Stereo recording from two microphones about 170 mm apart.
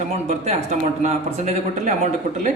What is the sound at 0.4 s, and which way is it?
Speech, 40° right (ahead or behind).